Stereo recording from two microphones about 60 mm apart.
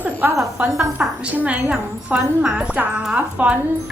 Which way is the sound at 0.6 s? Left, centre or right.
Centre.